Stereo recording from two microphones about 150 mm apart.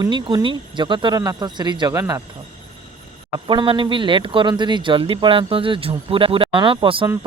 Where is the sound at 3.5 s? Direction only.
35° right (ahead or behind).